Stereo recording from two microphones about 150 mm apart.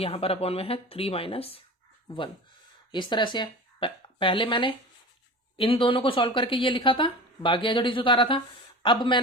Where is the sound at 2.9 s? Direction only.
30° left (ahead or behind).